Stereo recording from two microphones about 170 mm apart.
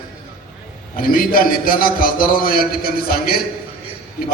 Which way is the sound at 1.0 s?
55° left (ahead or behind).